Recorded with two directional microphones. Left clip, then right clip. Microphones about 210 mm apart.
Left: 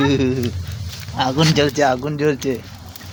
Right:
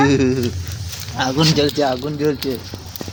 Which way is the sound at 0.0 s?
Centre (ahead or behind).